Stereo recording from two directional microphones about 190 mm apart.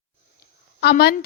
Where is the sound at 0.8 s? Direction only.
60° left (ahead or behind).